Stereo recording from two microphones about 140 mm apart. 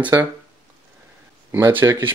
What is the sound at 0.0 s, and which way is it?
Speech, 15° right (ahead or behind).